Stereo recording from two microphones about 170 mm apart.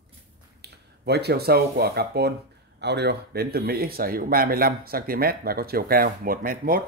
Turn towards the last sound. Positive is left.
turn(degrees=-55)  # may be behind; listen again after turning